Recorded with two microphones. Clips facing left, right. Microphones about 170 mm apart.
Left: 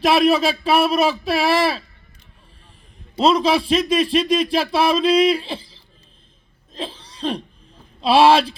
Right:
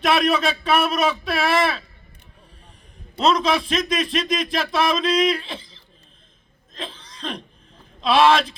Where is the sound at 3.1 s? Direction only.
30° left (ahead or behind).